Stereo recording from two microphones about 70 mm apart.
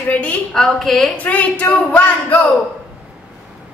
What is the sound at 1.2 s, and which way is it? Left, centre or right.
A woman's voice, left.